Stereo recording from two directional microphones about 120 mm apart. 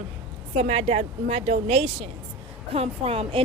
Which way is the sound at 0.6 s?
60° right (ahead or behind).